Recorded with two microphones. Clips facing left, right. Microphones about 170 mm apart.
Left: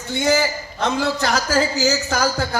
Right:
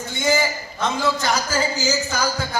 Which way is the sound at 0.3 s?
65° left (ahead or behind).